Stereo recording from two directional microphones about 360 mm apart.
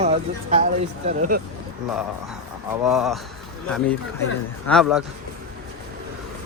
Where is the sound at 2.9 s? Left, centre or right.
Centre.